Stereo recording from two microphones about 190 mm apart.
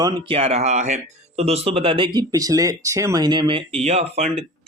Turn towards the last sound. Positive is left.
turn(degrees=-35)  # may be behind; listen again after turning